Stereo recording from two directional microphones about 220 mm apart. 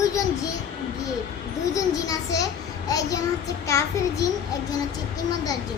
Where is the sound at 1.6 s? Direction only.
15° left (ahead or behind).